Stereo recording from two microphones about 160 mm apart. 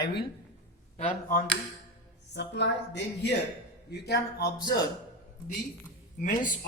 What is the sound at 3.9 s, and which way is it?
Speech, 90° left.